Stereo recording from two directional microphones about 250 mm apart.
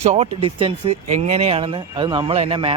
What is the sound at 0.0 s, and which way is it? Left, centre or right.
Speech, right.